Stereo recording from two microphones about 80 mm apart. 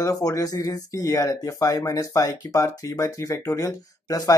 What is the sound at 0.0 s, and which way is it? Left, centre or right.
Speech, left.